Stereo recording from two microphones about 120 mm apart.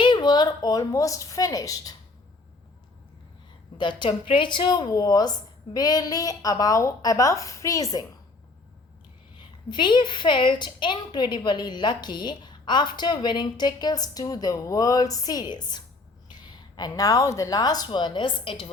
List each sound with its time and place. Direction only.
0.0 s a woman's voice: 40° left (ahead or behind)
3.8 s a woman's voice: 40° left (ahead or behind)
9.4 s a woman's voice: 40° left (ahead or behind)